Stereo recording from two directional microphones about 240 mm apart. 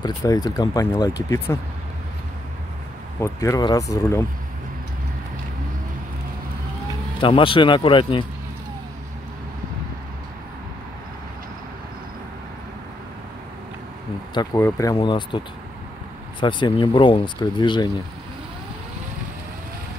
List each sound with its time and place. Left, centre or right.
0.0 s speech: centre
3.2 s speech: centre
7.2 s speech: left
14.3 s speech: centre